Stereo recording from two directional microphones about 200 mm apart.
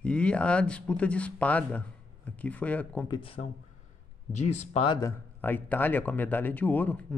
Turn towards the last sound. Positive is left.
turn(degrees=10)  # may be behind; listen again after turning